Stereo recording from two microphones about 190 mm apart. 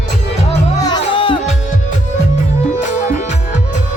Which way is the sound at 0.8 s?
25° left (ahead or behind).